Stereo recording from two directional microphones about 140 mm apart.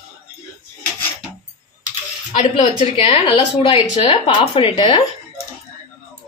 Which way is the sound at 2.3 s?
45° left (ahead or behind).